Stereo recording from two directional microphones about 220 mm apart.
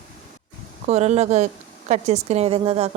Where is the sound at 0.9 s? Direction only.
30° right (ahead or behind).